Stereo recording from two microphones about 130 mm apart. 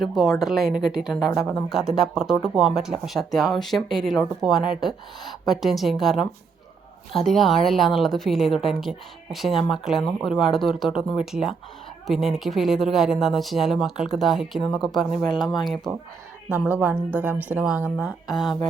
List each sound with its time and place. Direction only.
0.0 s a woman's voice: centre (ahead or behind)
1.4 s speech: 25° left (ahead or behind)
1.9 s a woman's voice: centre (ahead or behind)
16.5 s speech: 10° right (ahead or behind)
18.0 s a woman's voice: centre (ahead or behind)